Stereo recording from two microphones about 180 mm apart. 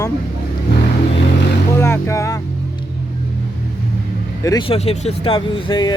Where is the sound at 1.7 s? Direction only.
15° left (ahead or behind).